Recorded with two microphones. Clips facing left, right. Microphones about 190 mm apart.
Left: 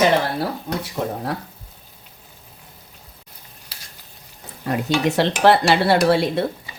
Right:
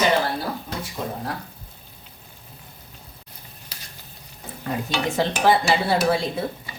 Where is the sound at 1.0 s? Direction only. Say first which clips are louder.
Left 5 dB; 65° left (ahead or behind).